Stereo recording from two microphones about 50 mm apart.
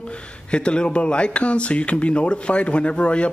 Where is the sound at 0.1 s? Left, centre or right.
Left.